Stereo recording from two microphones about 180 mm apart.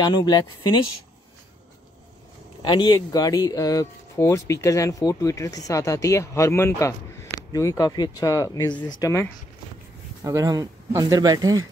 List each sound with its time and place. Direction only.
0.0 s speech: 25° left (ahead or behind)
2.6 s speech: 25° left (ahead or behind)
10.2 s speech: 20° right (ahead or behind)